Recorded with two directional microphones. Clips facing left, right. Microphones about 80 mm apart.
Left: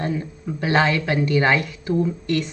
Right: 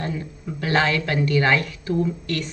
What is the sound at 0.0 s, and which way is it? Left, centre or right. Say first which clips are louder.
Speech: left 3 dB; centre.